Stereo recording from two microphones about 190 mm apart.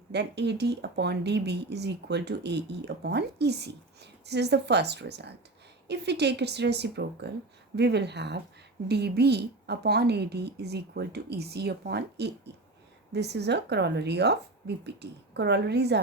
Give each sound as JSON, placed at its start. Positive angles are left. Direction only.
{"t": 0.1, "sound": "speech", "side_deg": -65}